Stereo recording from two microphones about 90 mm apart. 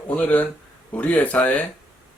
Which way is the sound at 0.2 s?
15° left (ahead or behind).